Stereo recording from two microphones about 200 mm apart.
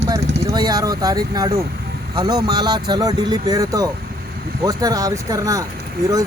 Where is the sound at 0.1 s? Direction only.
20° right (ahead or behind).